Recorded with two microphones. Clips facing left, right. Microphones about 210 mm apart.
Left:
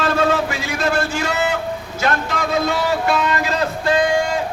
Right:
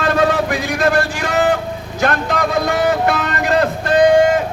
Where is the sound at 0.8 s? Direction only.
50° right (ahead or behind).